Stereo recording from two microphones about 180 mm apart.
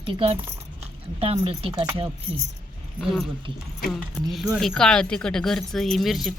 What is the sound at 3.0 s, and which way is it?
Speech, centre (ahead or behind).